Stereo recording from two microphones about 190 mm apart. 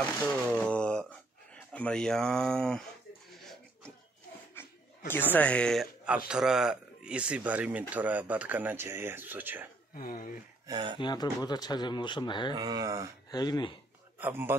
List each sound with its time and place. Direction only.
0.0 s speech: 5° left (ahead or behind)
4.6 s speech: 10° left (ahead or behind); by 9.7 s 10° right (ahead or behind)
9.9 s speech: 45° left (ahead or behind)
10.7 s a sound: 25° right (ahead or behind)
11.0 s speech: 20° left (ahead or behind)
12.5 s a sound: 20° right (ahead or behind)
13.3 s speech: 20° left (ahead or behind)
14.2 s speech: 10° right (ahead or behind)